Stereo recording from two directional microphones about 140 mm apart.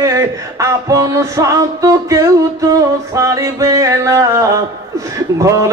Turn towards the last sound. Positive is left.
turn(degrees=-25)  # may be behind; listen again after turning